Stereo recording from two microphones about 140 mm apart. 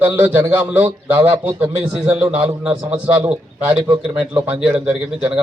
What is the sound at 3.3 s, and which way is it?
A man's voice, 10° right (ahead or behind).